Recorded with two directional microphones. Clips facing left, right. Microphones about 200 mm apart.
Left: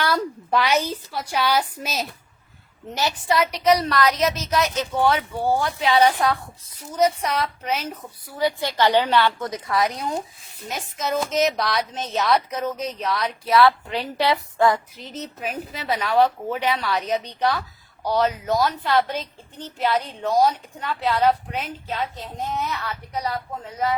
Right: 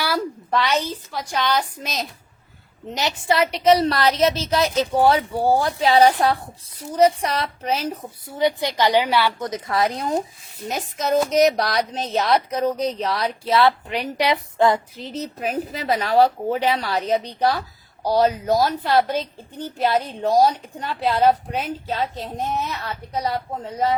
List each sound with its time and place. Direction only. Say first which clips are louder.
0.5 s a woman's voice: left 1 dB; 10° left (ahead or behind)
2.9 s a woman's voice: right 1 dB; 20° right (ahead or behind)
9.5 s a woman's voice: right 1 dB; 25° right (ahead or behind)
11.5 s a woman's voice: right 2 dB; 35° right (ahead or behind)